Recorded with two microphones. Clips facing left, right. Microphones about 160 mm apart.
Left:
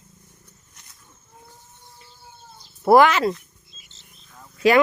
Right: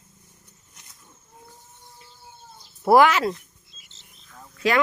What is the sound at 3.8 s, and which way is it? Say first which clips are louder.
Wild animals: left 2 dB; 85° right.